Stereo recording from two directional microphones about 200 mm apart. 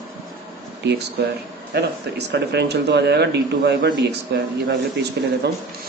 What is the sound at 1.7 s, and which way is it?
Speech, 55° right (ahead or behind).